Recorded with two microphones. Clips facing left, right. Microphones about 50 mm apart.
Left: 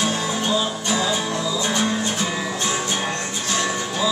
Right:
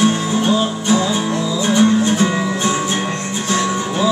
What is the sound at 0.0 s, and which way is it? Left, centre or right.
Music, right.